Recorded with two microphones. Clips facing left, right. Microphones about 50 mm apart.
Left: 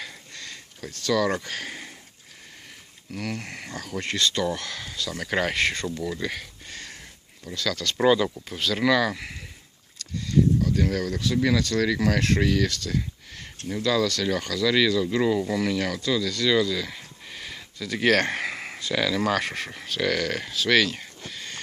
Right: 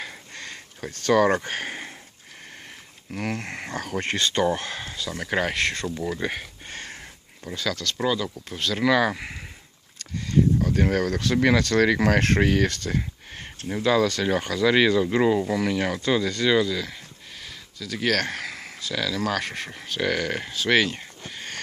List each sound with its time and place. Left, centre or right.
0.0 s a sound: right
3.1 s speech: right
5.2 s speech: centre
6.0 s a sound: right
7.4 s speech: right
7.9 s speech: centre
8.4 s speech: centre
9.0 s speech: right
10.0 s speech: right; by 15.8 s centre
16.0 s speech: right; by 18.8 s centre
18.8 s speech: centre